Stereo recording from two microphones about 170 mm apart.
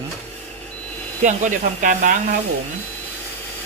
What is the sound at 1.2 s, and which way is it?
Speech, 50° right (ahead or behind).